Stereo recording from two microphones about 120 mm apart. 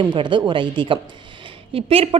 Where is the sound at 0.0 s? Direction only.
40° right (ahead or behind).